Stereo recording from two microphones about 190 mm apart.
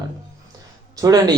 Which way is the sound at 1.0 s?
20° right (ahead or behind).